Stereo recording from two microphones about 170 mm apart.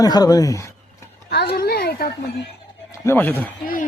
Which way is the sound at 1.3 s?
70° left (ahead or behind).